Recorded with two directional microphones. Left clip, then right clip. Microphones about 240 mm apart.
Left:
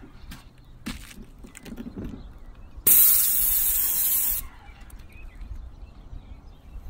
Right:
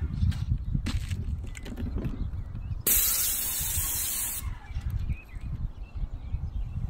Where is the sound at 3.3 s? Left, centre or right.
Centre.